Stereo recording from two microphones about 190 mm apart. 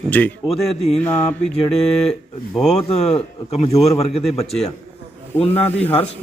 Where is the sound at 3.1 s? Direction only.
35° left (ahead or behind).